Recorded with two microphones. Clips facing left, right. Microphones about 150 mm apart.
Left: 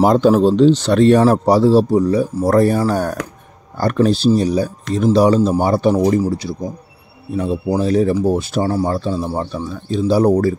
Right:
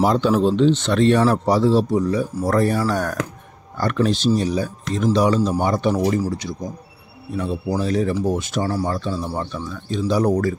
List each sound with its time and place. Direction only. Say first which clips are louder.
0.0 s a man's voice: left 5 dB; 45° left (ahead or behind)
5.9 s a man's voice: left 5 dB; 25° left (ahead or behind)